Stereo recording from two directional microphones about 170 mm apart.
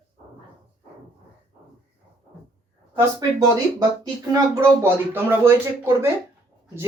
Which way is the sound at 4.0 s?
20° right (ahead or behind).